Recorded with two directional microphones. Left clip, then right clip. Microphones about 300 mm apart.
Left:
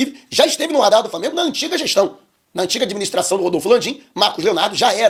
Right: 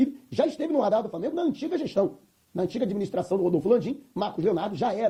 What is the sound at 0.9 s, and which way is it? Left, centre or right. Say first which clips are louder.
Speech: left 11 dB; centre.